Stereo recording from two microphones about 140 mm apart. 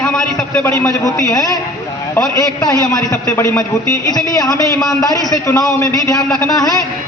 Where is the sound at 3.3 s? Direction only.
20° left (ahead or behind).